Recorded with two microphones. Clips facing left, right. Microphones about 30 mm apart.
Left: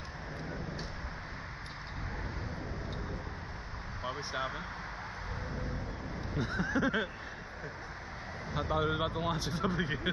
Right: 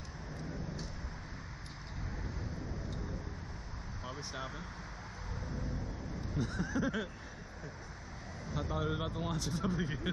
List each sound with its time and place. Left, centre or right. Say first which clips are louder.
0.4 s vehicle: left 2 dB; left
4.0 s speech: left 7 dB; left
5.5 s vehicle: left 2 dB; left
8.5 s speech: left 5 dB; left